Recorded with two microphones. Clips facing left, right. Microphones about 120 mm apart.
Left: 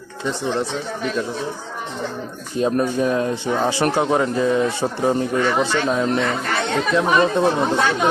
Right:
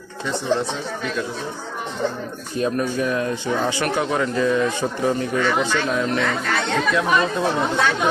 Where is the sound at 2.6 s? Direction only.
25° left (ahead or behind).